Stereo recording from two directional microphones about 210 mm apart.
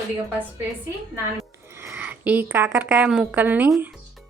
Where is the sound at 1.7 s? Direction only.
15° right (ahead or behind).